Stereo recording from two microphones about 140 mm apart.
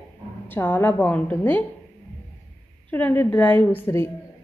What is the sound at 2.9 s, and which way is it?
A woman's voice, 15° left (ahead or behind).